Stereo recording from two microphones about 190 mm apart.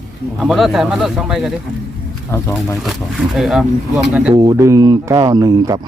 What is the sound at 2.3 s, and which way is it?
Speech, 15° left (ahead or behind).